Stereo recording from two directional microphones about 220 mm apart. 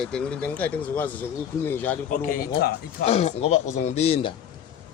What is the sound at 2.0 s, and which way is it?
Speech, 40° left (ahead or behind).